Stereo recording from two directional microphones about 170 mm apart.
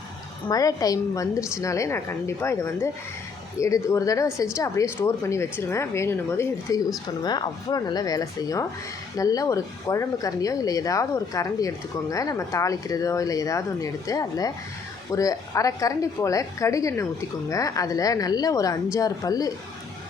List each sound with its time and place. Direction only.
0.4 s a woman's voice: 20° left (ahead or behind)